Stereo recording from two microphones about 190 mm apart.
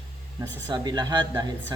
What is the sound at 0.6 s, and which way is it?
Speech, 20° right (ahead or behind).